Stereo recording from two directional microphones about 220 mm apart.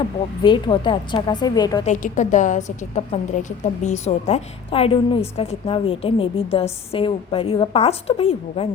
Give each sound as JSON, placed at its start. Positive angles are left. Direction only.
{"t": 0.4, "sound": "a woman's voice", "side_deg": 20}
{"t": 1.8, "sound": "a woman's voice", "side_deg": 35}